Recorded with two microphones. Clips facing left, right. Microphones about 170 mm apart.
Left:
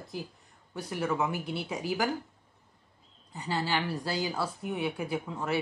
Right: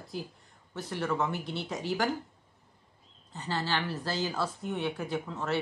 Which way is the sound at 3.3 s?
10° left (ahead or behind).